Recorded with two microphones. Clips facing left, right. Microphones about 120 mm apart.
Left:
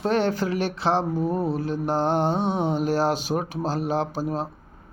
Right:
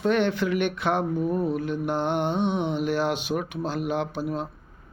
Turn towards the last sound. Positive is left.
turn(degrees=35)  # may be behind; listen again after turning